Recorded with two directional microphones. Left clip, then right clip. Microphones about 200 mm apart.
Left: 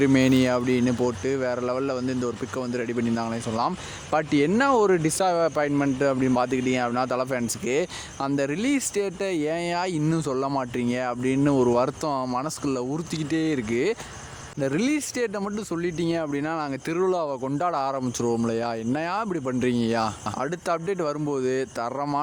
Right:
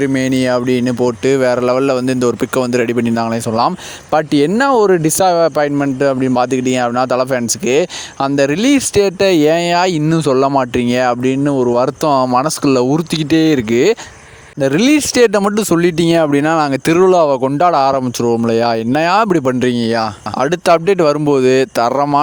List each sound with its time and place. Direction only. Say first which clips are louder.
0.0 s speech: right 6 dB; 20° right (ahead or behind)
1.2 s speech: right 13 dB; 50° right (ahead or behind)